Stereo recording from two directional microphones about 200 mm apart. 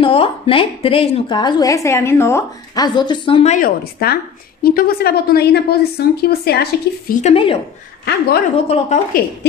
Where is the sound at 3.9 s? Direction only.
50° left (ahead or behind).